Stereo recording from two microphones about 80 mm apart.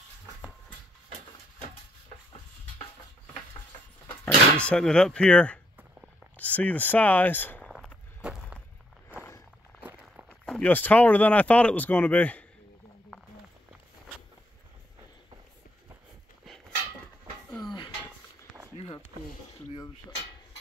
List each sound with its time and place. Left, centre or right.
4.2 s speech: centre
8.2 s walk: centre
10.4 s a sound: centre
10.7 s speech: left
17.5 s dishes: centre